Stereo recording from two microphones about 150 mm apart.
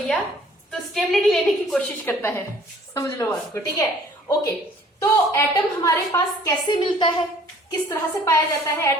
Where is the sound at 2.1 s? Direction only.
15° left (ahead or behind).